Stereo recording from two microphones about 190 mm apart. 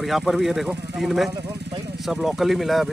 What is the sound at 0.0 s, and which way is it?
Speech, centre (ahead or behind).